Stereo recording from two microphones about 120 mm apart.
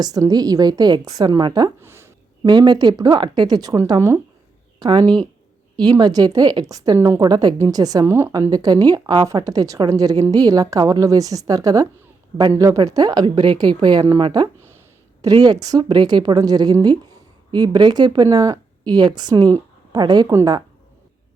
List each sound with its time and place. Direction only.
0.0 s a woman's voice: 30° right (ahead or behind)
1.8 s a sound: 20° right (ahead or behind)
2.4 s a woman's voice: 35° right (ahead or behind)
4.8 s a woman's voice: 40° right (ahead or behind)